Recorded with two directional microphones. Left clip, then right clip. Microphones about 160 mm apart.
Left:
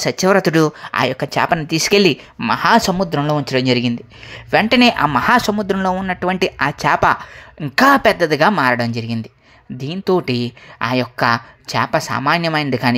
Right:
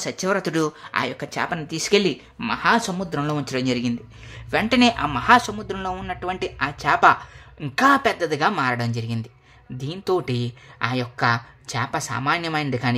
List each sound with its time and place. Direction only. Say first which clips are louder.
0.0 s speech: left 9 dB; 40° left (ahead or behind)
3.2 s speech: left 8 dB; 25° left (ahead or behind)